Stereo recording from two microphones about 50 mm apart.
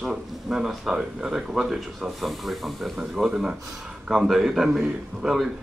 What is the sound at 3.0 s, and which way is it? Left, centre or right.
Speech, centre.